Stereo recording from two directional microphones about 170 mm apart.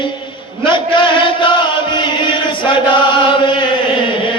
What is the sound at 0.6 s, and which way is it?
Music, 30° left (ahead or behind).